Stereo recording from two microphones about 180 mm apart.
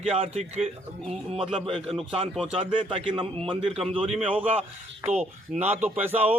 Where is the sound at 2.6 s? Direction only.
30° right (ahead or behind).